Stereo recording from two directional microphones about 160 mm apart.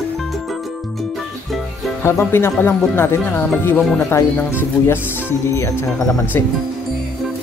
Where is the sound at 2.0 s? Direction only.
15° left (ahead or behind).